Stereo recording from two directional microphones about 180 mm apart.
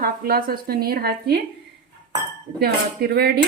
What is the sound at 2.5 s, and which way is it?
Speech, 60° right (ahead or behind).